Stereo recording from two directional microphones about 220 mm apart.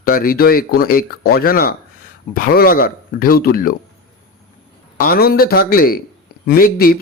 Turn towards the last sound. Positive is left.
turn(degrees=40)  # may be behind; listen again after turning